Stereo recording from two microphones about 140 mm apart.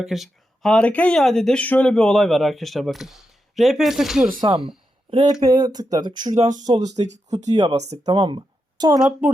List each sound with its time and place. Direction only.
0.0 s speech: centre (ahead or behind)
4.4 s speech: 30° right (ahead or behind)
7.0 s speech: 50° right (ahead or behind)
7.4 s speech: 30° right (ahead or behind)
7.7 s speech: 50° right (ahead or behind)
8.0 s speech: 35° right (ahead or behind)